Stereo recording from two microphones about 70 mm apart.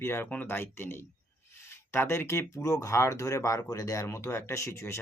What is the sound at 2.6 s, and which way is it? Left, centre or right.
Speech, left.